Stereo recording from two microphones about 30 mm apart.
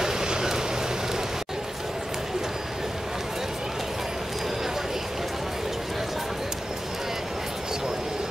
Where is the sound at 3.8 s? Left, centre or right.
Centre.